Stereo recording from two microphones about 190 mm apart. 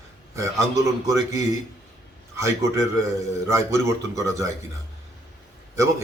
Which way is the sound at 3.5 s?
15° right (ahead or behind).